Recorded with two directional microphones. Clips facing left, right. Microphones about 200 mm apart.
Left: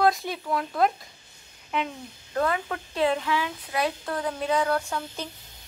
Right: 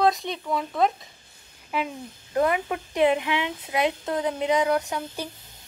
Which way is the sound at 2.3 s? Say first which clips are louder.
Right 3 dB; 15° right (ahead or behind).